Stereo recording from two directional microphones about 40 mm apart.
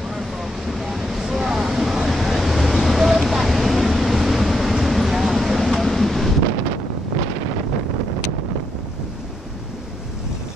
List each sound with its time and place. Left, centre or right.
0.1 s vehicle: centre